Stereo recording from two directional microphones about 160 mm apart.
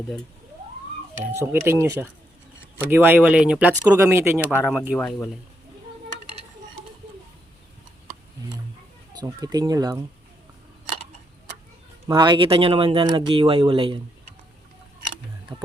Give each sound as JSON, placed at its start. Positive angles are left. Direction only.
{"t": 1.2, "sound": "speech", "side_deg": -15}
{"t": 9.2, "sound": "speech", "side_deg": -25}
{"t": 12.0, "sound": "speech", "side_deg": -30}